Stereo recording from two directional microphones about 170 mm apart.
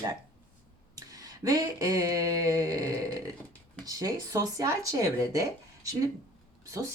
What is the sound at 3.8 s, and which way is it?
Speech, 20° right (ahead or behind).